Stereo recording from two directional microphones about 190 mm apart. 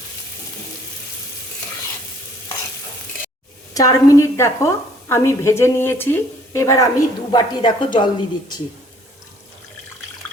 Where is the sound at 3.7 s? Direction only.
20° left (ahead or behind).